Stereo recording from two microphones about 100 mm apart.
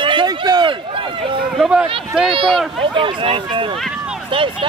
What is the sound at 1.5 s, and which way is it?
Speech, 5° right (ahead or behind).